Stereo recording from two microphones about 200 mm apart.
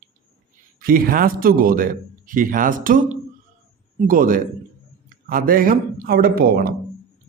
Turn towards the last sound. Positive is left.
turn(degrees=-50)  # may be behind; listen again after turning